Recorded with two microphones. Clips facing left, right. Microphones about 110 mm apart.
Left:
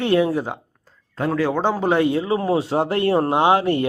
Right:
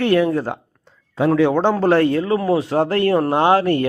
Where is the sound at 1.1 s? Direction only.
Centre (ahead or behind).